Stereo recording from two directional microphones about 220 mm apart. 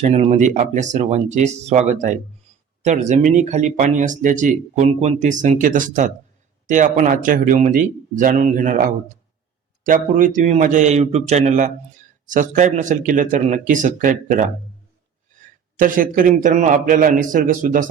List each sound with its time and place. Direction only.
0.0 s speech: 30° right (ahead or behind)
15.8 s speech: 40° right (ahead or behind)